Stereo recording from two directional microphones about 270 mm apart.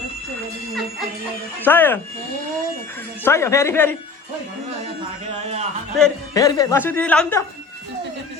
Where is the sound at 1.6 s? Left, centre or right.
Centre.